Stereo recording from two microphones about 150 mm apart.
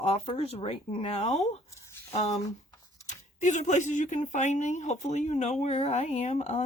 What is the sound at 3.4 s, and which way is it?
Speech, 55° left (ahead or behind).